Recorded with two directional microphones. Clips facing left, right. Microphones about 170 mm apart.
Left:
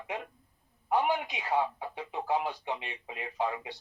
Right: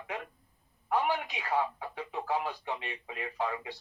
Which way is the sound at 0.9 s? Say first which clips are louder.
Left 2 dB; 20° left (ahead or behind).